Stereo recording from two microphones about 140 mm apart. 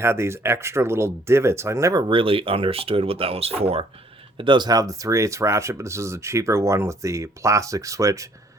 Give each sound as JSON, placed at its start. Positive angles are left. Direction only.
{"t": 0.0, "sound": "speech", "side_deg": -20}
{"t": 4.4, "sound": "speech", "side_deg": -35}